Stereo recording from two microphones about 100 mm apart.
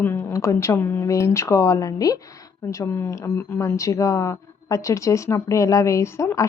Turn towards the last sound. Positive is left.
turn(degrees=30)  # may be behind; listen again after turning